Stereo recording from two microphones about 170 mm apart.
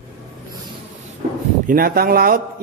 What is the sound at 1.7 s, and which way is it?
Speech, 60° right (ahead or behind).